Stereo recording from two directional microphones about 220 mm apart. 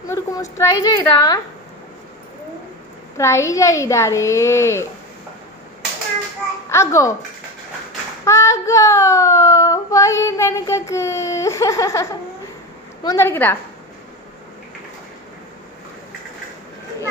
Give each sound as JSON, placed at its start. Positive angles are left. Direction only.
{"t": 0.1, "sound": "child singing", "side_deg": 15}
{"t": 3.2, "sound": "child singing", "side_deg": 15}
{"t": 6.7, "sound": "child singing", "side_deg": 15}
{"t": 8.3, "sound": "child singing", "side_deg": 15}